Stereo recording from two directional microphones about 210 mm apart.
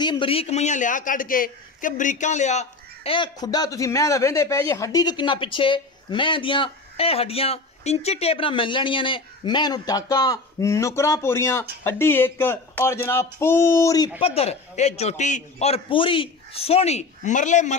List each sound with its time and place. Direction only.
0.0 s a man's voice: 20° left (ahead or behind)
14.2 s a man's voice: 30° left (ahead or behind)